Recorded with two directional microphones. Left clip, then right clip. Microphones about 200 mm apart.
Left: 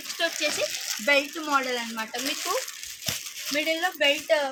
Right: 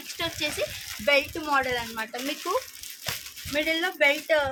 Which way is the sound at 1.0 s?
25° right (ahead or behind).